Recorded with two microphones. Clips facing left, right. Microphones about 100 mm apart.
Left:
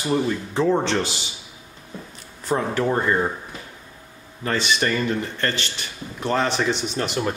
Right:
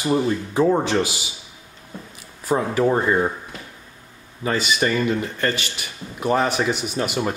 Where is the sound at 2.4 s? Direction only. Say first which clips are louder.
Right 3 dB; 5° right (ahead or behind).